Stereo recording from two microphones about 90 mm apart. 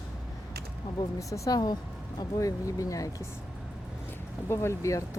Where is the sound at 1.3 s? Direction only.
45° left (ahead or behind).